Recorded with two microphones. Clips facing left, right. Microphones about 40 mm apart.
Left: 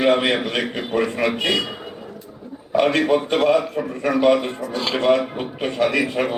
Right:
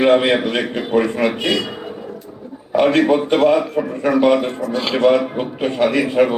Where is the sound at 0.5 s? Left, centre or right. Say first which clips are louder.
Right 4 dB; centre.